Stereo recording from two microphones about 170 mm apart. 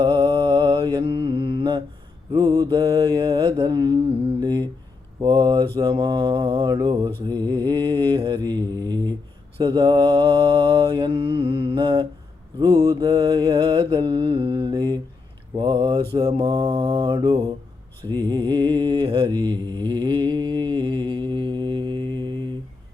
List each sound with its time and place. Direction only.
0.0 s mantra: 30° right (ahead or behind)
4.4 s a sound: 25° right (ahead or behind)
5.2 s mantra: 25° right (ahead or behind)